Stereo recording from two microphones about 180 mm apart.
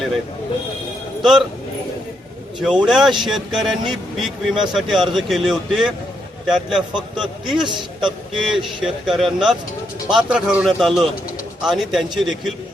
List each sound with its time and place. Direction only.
1.2 s a man's voice: centre (ahead or behind)
2.6 s a man's voice: 5° right (ahead or behind)
7.6 s a man's voice: 25° right (ahead or behind)
8.4 s a man's voice: 5° right (ahead or behind)